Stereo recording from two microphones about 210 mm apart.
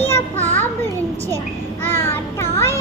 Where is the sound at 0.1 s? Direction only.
10° left (ahead or behind).